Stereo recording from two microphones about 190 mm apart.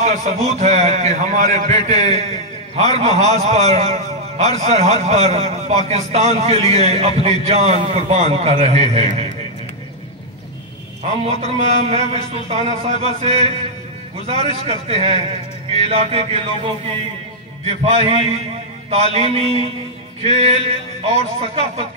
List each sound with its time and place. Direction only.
0.0 s a man's voice: 35° right (ahead or behind)
11.2 s a man's voice: 35° right (ahead or behind)
17.6 s a man's voice: 35° right (ahead or behind)